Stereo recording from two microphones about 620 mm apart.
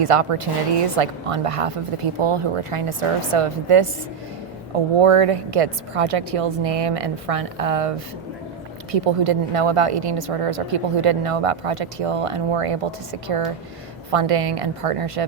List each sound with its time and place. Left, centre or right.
0.0 s speech: right
4.9 s speech: right